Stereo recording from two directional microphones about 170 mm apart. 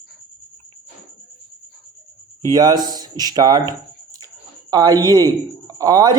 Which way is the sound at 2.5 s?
20° right (ahead or behind).